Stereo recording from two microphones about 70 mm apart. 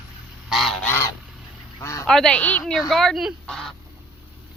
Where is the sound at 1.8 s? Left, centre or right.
Left.